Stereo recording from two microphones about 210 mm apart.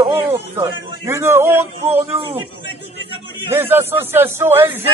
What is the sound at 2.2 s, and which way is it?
Speech, 25° right (ahead or behind).